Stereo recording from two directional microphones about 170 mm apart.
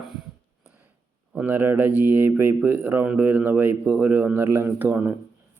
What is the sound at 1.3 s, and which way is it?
Speech, 10° right (ahead or behind).